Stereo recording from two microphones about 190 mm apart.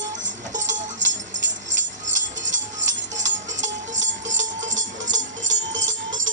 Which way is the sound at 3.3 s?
40° right (ahead or behind).